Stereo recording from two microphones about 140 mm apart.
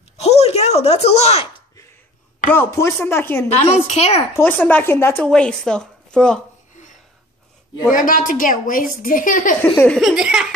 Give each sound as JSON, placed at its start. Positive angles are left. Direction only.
{"t": 0.2, "sound": "a sound", "side_deg": 50}
{"t": 2.5, "sound": "a woman's voice", "side_deg": 20}
{"t": 3.5, "sound": "a woman's voice", "side_deg": 50}
{"t": 4.4, "sound": "a woman's voice", "side_deg": 15}
{"t": 7.9, "sound": "a woman's voice", "side_deg": 75}
{"t": 9.6, "sound": "a woman's voice", "side_deg": 10}
{"t": 9.9, "sound": "laughter", "side_deg": -5}